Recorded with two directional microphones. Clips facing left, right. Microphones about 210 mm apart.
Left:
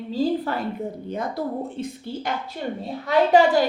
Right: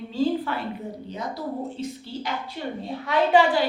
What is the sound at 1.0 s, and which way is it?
A woman's voice, 55° left (ahead or behind).